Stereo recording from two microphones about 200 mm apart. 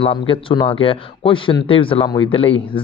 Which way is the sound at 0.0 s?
25° left (ahead or behind).